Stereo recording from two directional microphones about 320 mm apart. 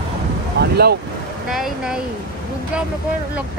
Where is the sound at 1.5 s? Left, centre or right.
Centre.